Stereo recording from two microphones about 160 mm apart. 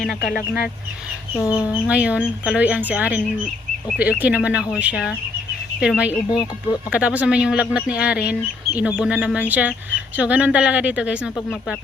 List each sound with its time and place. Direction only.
0.1 s speech: 65° left (ahead or behind)
1.5 s speech: 10° right (ahead or behind)
6.3 s speech: 30° left (ahead or behind)
6.9 s speech: 10° right (ahead or behind)